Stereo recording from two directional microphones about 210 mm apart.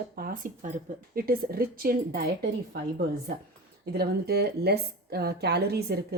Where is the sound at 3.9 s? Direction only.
50° right (ahead or behind).